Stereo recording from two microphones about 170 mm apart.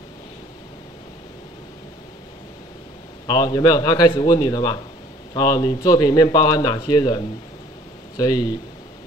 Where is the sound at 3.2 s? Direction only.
25° left (ahead or behind).